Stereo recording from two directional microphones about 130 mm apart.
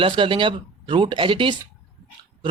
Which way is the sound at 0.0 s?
40° right (ahead or behind).